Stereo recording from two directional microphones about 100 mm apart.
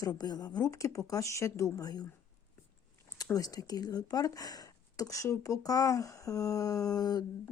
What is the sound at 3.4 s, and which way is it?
Speech, 40° left (ahead or behind).